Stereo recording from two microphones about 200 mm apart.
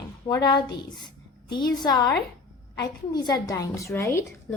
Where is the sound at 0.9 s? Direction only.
20° left (ahead or behind).